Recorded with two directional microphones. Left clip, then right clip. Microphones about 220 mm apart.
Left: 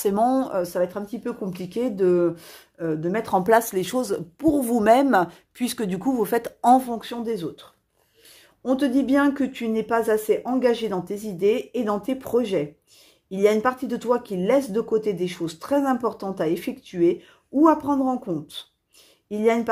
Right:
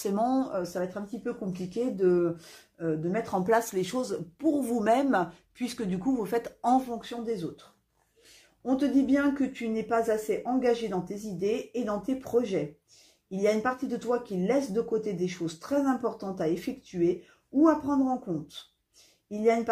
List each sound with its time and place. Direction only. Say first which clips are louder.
0.0 s a woman's voice: left 7 dB; 35° left (ahead or behind)
8.6 s a woman's voice: left 4 dB; 45° left (ahead or behind)